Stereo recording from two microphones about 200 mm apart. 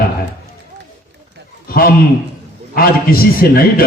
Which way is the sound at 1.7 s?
50° left (ahead or behind).